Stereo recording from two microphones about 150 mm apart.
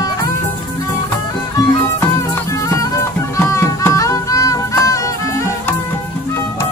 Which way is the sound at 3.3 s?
20° left (ahead or behind).